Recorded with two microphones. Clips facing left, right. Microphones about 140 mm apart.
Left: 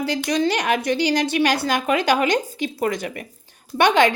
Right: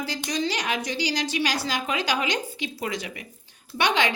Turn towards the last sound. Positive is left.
turn(degrees=50)  # may be behind; listen again after turning